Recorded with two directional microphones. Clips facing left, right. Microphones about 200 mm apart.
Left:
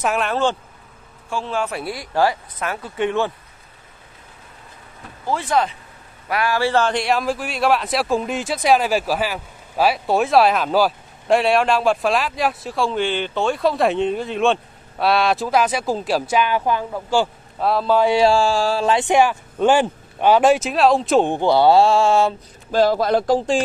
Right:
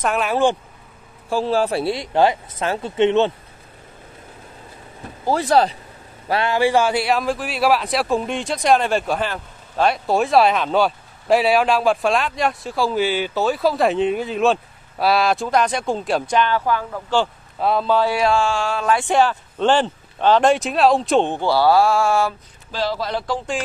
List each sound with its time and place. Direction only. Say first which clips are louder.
0.0 s a man's voice: even; centre (ahead or behind)
1.3 s speech: right 5 dB; 35° right (ahead or behind)
5.2 s a man's voice: right 4 dB; 35° right (ahead or behind); by 18.0 s 5° left (ahead or behind)
18.0 s speech: left 3 dB; 30° left (ahead or behind); by 21.3 s centre (ahead or behind)
21.3 s speech: left 2 dB; 20° left (ahead or behind)
22.7 s speech: left 7 dB; 50° left (ahead or behind)